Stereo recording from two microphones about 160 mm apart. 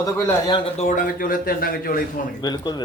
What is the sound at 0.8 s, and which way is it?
Speech, 60° left (ahead or behind).